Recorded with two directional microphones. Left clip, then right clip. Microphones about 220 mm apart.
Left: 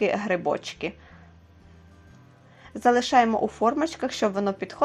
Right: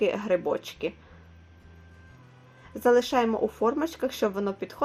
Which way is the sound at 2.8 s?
30° left (ahead or behind).